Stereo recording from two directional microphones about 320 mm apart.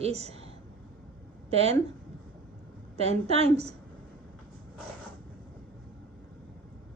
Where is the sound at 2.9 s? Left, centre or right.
Centre.